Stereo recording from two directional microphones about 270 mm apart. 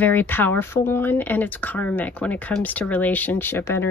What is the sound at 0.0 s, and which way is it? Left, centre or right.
Speech, centre.